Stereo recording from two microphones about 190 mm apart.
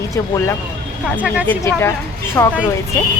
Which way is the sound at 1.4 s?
10° left (ahead or behind).